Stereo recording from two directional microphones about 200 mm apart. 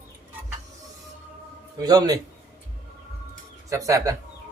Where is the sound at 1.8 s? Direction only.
20° right (ahead or behind).